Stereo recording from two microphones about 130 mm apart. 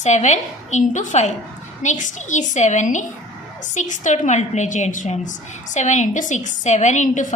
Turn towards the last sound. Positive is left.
turn(degrees=70)  # may be behind; listen again after turning